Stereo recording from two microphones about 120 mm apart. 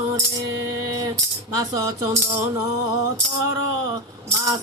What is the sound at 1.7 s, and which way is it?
Speech, 30° right (ahead or behind).